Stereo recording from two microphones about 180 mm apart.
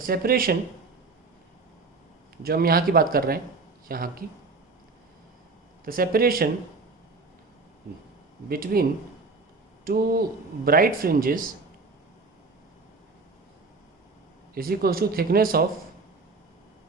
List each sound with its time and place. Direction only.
0.0 s speech: 55° right (ahead or behind)
2.4 s speech: 55° right (ahead or behind)
5.8 s speech: 55° right (ahead or behind)
8.4 s speech: 55° right (ahead or behind)
14.5 s speech: 55° right (ahead or behind)